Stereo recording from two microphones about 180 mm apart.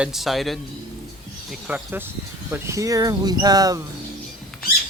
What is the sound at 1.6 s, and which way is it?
Speech, 10° right (ahead or behind).